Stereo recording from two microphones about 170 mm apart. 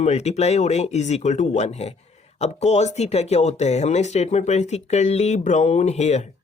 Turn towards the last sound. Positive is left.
turn(degrees=40)  # may be behind; listen again after turning